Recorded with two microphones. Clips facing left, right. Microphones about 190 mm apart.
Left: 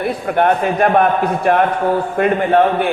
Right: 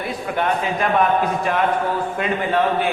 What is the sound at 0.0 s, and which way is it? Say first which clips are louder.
A man's voice: left 7 dB; 55° left (ahead or behind).